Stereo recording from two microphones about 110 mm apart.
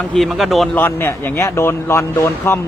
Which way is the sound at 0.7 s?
20° left (ahead or behind).